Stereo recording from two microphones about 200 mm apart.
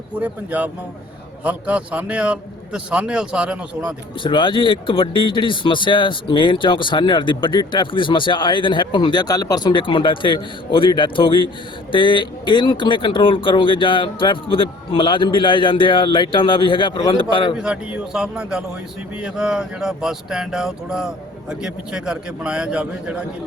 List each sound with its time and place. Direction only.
0.2 s a man's voice: 5° right (ahead or behind)
4.2 s speech: 25° left (ahead or behind)
17.6 s a man's voice: 5° right (ahead or behind)